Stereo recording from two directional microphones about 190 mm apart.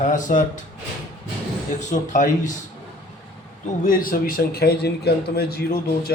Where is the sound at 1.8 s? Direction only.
40° left (ahead or behind).